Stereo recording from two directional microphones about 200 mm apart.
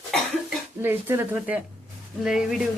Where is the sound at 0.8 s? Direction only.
10° right (ahead or behind).